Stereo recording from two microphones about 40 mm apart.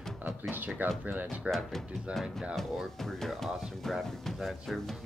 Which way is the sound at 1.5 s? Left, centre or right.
Right.